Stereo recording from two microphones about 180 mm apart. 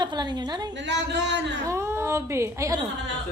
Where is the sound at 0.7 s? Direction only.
80° right.